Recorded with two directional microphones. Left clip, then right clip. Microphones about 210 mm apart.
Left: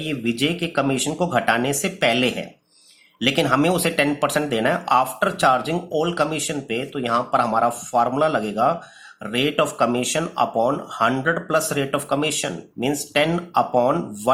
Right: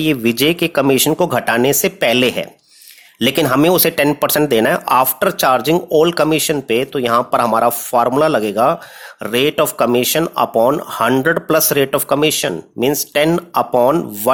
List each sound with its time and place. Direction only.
0.0 s speech: 45° right (ahead or behind)